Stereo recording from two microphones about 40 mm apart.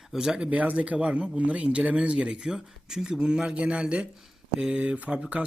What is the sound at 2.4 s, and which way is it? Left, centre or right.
Speech, centre.